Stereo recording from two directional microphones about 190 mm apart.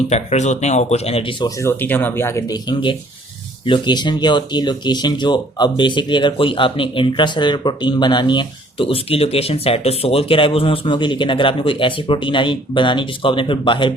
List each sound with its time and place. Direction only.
0.1 s speech: 35° left (ahead or behind)
1.5 s speech: 10° left (ahead or behind)